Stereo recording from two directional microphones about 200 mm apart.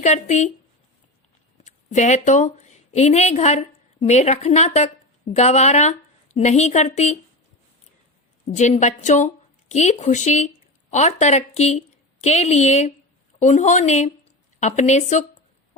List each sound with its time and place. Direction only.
0.0 s a woman's voice: 35° left (ahead or behind)
1.6 s a woman's voice: 35° left (ahead or behind)
8.4 s a woman's voice: 35° left (ahead or behind)